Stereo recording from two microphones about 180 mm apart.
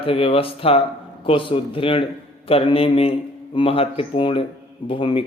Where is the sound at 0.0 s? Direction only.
30° left (ahead or behind).